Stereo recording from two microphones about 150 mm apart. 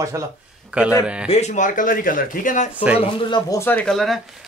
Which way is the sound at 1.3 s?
50° left (ahead or behind).